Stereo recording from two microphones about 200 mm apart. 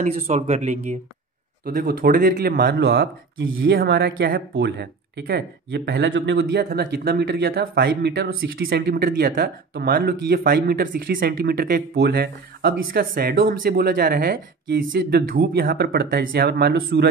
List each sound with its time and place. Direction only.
0.0 s speech: 35° right (ahead or behind)
1.6 s speech: 45° right (ahead or behind)